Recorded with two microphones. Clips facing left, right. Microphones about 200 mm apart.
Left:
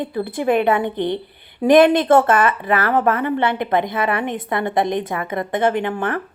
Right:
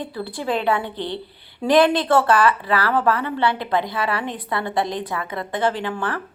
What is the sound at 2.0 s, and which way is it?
Speech, 20° left (ahead or behind).